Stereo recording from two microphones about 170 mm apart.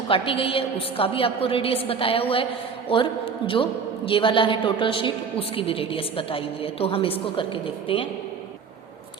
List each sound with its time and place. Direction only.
0.1 s a woman's voice: 30° left (ahead or behind)